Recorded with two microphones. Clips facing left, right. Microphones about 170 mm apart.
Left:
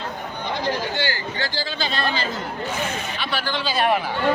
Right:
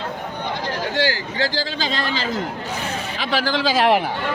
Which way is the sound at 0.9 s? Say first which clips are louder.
Right 4 dB; 90° right.